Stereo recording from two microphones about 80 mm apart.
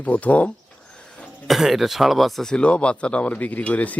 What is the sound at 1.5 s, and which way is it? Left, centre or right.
Speech, centre.